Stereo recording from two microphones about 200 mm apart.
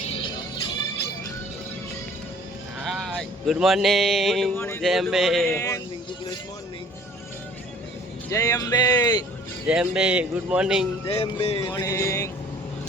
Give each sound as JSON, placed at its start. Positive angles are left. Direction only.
{"t": 0.1, "sound": "music", "side_deg": 25}
{"t": 2.8, "sound": "a man's voice", "side_deg": 0}
{"t": 5.5, "sound": "speech", "side_deg": 15}
{"t": 8.3, "sound": "speech", "side_deg": 15}
{"t": 9.6, "sound": "a man's voice", "side_deg": -5}
{"t": 11.0, "sound": "music", "side_deg": 30}
{"t": 11.7, "sound": "speech", "side_deg": 15}